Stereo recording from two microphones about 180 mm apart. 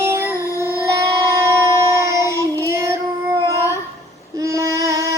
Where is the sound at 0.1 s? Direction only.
15° right (ahead or behind).